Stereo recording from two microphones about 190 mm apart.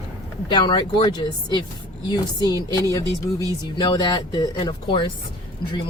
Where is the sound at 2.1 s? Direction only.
20° left (ahead or behind).